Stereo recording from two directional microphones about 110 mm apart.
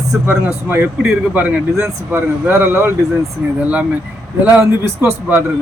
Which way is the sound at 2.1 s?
20° right (ahead or behind).